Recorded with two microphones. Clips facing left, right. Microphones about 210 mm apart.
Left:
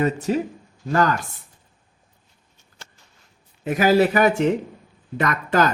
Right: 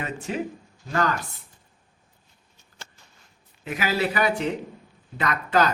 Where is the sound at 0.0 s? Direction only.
40° left (ahead or behind).